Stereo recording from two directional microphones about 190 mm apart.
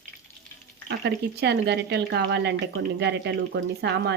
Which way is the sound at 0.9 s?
65° right (ahead or behind).